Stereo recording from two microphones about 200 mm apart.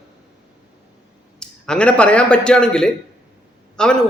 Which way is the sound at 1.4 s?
5° left (ahead or behind).